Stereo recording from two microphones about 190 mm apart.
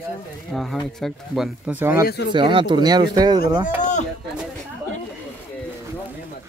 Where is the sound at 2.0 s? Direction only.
60° left (ahead or behind).